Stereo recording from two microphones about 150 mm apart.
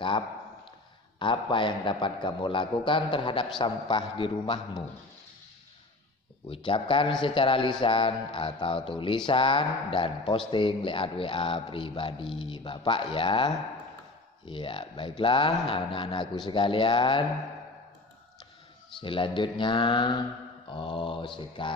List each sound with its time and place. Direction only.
1.2 s speech: 35° left (ahead or behind)
6.5 s speech: 35° left (ahead or behind)
19.0 s speech: 35° left (ahead or behind)